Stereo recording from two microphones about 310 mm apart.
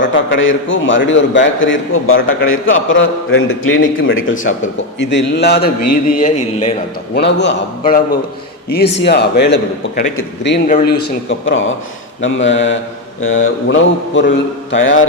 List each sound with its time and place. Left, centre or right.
0.0 s a man's voice: left
5.8 s a man's voice: left
6.1 s a man's voice: left
7.2 s a man's voice: left